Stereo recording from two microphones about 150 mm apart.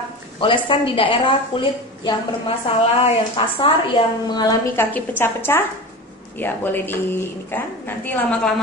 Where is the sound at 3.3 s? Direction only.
35° left (ahead or behind).